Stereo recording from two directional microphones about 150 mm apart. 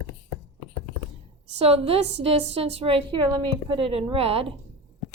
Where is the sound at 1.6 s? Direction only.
40° right (ahead or behind).